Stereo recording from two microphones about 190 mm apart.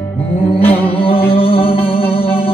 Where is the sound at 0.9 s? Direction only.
30° left (ahead or behind).